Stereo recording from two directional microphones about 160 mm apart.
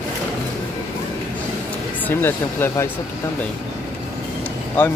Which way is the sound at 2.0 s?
15° left (ahead or behind).